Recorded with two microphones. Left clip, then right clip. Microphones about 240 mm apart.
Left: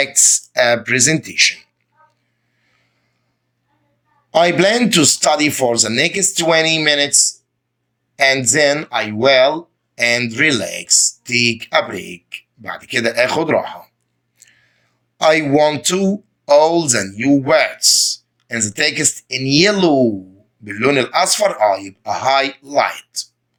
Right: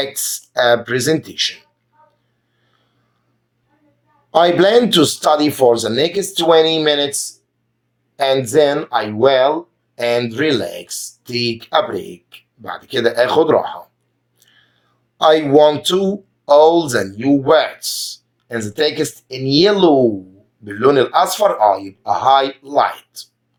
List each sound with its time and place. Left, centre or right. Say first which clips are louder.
0.0 s speech: left 7 dB; left
4.3 s speech: right 1 dB; left
14.3 s clicking: left 1 dB; left
15.5 s speech: right 3 dB; left
19.4 s speech: even; left
19.6 s speech: right 3 dB; left
22.6 s speech: right 1 dB; left
22.9 s speech: left 2 dB; left